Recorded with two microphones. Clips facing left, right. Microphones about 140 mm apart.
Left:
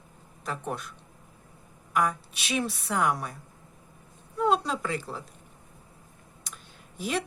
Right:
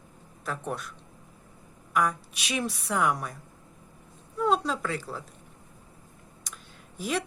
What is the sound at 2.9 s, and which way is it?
Speech, 5° right (ahead or behind).